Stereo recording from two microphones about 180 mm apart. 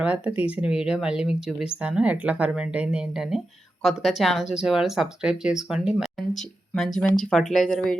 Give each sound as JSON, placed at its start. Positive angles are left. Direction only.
{"t": 0.0, "sound": "a woman's voice", "side_deg": -10}